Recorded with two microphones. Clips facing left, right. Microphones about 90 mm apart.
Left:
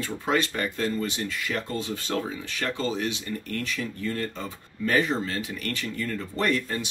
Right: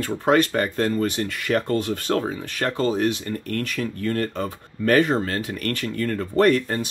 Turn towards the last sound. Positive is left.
turn(degrees=-45)  # may be behind; listen again after turning